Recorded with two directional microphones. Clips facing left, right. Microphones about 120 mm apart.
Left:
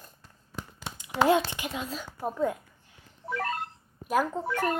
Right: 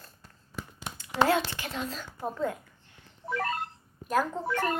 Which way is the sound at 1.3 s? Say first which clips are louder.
Left 3 dB; 20° left (ahead or behind).